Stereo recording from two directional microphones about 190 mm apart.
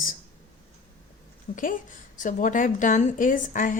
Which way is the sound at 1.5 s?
40° left (ahead or behind).